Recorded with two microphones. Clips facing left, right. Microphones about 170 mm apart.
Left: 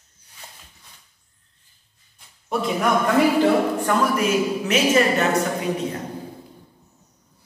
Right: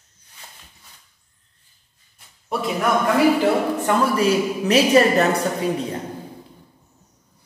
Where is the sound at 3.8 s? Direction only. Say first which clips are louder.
Right 1 dB; 25° right (ahead or behind).